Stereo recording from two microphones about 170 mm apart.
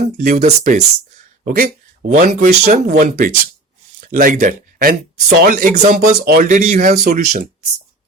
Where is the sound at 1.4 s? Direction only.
65° right (ahead or behind).